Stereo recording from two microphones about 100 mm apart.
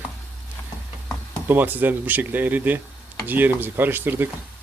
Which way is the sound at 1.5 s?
20° right (ahead or behind).